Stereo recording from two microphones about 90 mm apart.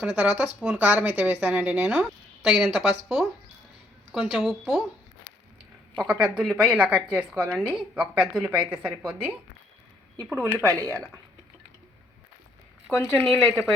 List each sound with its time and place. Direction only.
0.0 s a woman's voice: 10° right (ahead or behind)
4.4 s speech: 5° left (ahead or behind)
6.0 s a woman's voice: 10° right (ahead or behind)
10.7 s speech: 40° right (ahead or behind)
12.9 s speech: 5° left (ahead or behind)